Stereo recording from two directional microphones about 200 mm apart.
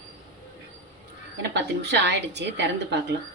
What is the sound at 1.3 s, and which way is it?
A woman's voice, 60° right (ahead or behind).